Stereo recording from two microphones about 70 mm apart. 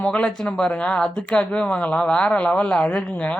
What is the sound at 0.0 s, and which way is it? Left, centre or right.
Speech, centre.